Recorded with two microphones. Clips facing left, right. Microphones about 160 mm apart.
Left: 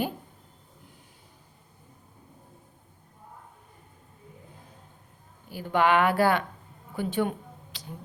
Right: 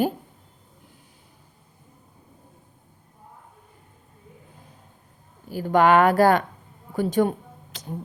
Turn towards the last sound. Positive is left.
turn(degrees=-45)  # may be behind; listen again after turning